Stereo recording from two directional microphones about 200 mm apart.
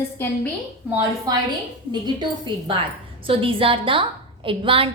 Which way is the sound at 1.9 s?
20° right (ahead or behind).